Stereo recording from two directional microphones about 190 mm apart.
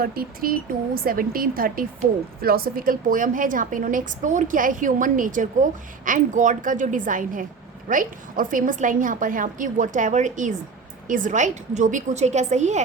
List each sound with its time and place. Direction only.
0.0 s a woman's voice: 50° right (ahead or behind)